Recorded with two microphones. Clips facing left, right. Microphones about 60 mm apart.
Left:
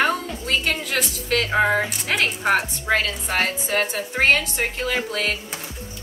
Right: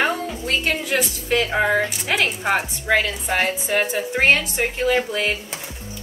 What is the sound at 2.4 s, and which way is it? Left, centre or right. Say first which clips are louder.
Speech: left 1 dB; centre.